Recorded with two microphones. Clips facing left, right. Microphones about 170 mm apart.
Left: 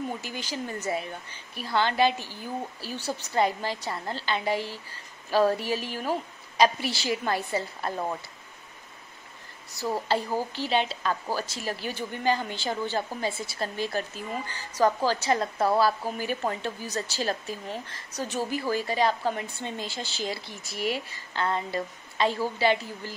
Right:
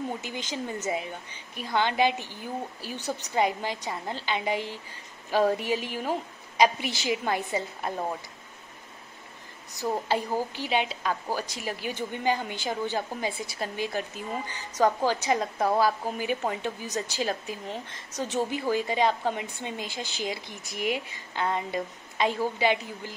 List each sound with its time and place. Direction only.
0.2 s a woman's voice: 20° right (ahead or behind)
9.7 s a woman's voice: 20° right (ahead or behind)